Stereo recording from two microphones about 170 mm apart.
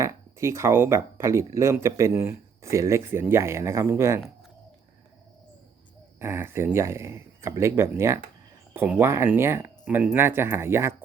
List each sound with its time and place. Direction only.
0.0 s speech: 15° right (ahead or behind)
6.1 s speech: 15° right (ahead or behind)